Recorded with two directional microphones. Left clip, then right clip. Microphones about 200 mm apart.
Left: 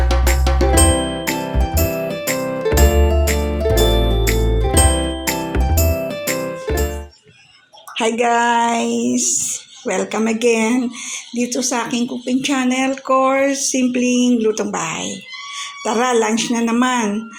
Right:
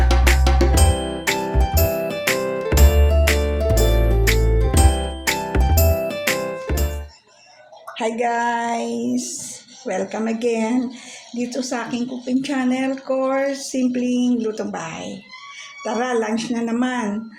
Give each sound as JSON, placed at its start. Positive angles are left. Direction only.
{"t": 0.1, "sound": "music", "side_deg": 0}
{"t": 7.9, "sound": "a woman's voice", "side_deg": 35}